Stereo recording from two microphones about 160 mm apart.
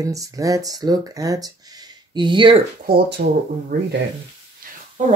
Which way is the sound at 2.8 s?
70° right (ahead or behind).